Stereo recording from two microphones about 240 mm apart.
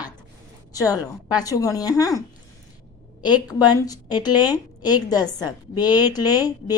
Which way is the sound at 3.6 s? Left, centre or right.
Centre.